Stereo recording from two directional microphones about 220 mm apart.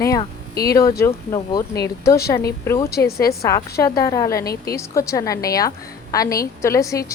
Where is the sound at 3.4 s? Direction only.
15° left (ahead or behind).